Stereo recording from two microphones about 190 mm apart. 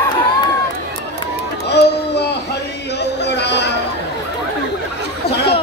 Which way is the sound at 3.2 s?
65° left (ahead or behind).